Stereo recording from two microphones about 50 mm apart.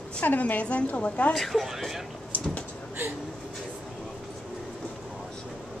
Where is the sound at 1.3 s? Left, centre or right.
Centre.